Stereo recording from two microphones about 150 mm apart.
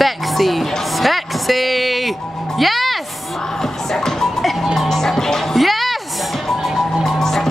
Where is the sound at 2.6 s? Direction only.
Centre (ahead or behind).